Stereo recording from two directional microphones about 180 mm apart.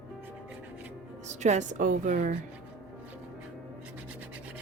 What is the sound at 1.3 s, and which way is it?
Speech, 40° right (ahead or behind).